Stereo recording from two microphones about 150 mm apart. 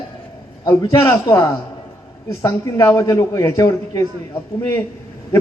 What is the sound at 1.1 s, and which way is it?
Speech, 20° left (ahead or behind).